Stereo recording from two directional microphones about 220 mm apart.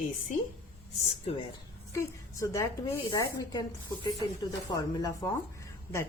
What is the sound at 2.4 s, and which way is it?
A woman's voice, 15° left (ahead or behind).